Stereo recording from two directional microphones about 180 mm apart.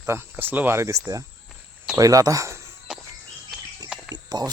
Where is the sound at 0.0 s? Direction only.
15° right (ahead or behind).